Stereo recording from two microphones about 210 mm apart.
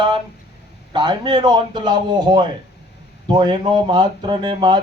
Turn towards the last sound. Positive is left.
turn(degrees=-20)  # may be behind; listen again after turning